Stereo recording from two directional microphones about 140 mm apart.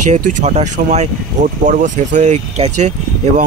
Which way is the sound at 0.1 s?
60° right (ahead or behind).